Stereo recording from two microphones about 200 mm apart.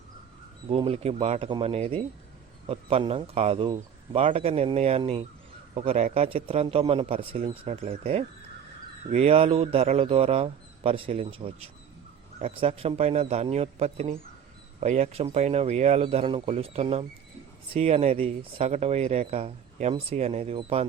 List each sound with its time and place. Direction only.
0.7 s speech: 30° right (ahead or behind)